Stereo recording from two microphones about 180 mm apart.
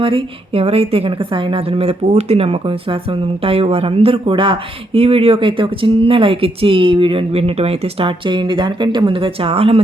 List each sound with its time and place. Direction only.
0.0 s a woman's voice: 30° right (ahead or behind)